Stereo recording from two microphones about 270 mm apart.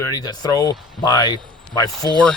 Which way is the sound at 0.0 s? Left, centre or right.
Centre.